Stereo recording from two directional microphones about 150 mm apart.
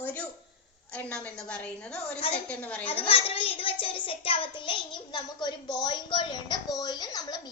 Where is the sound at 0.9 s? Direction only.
10° left (ahead or behind).